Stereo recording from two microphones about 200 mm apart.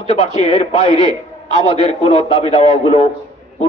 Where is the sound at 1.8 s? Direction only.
30° left (ahead or behind).